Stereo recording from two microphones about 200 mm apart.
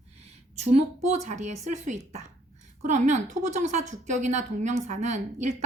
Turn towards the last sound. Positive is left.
turn(degrees=-35)  # may be behind; listen again after turning